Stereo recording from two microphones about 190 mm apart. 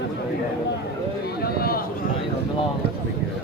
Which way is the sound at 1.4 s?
55° left (ahead or behind).